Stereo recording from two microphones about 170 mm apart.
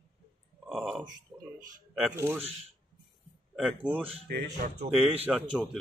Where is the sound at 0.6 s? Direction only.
Centre (ahead or behind).